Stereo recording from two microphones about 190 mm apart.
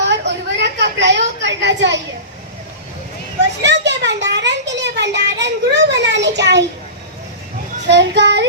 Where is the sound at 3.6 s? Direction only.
70° right (ahead or behind).